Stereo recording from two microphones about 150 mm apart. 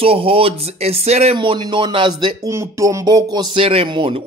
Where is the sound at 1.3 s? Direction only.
30° right (ahead or behind).